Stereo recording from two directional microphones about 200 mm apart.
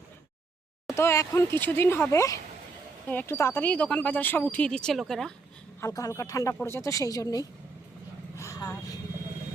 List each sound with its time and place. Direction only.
0.9 s speech: 15° left (ahead or behind)
5.8 s speech: 15° left (ahead or behind)